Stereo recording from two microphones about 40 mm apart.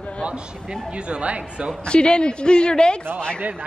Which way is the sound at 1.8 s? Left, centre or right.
Left.